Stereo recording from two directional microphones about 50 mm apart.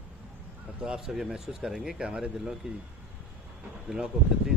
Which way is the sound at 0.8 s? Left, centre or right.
Centre.